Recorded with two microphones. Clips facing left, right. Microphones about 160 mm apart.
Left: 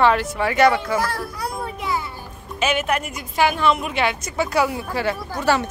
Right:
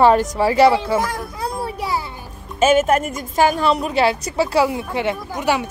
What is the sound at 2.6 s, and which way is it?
A woman's voice, 40° right (ahead or behind).